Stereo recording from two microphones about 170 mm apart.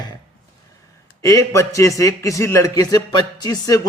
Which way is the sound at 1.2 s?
20° left (ahead or behind).